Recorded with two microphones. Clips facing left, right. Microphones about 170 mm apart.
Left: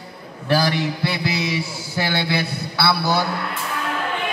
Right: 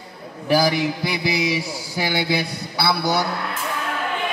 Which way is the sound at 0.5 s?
15° right (ahead or behind).